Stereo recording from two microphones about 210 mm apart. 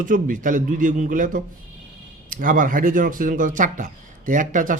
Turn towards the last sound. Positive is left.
turn(degrees=-40)  # may be behind; listen again after turning